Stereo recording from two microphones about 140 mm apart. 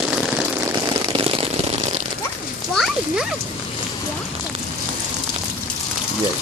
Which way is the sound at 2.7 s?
5° left (ahead or behind).